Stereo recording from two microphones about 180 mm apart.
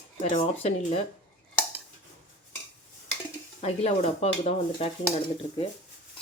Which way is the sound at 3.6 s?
35° left (ahead or behind).